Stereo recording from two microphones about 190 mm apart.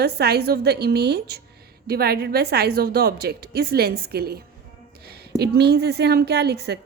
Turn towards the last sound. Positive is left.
turn(degrees=-60)  # may be behind; listen again after turning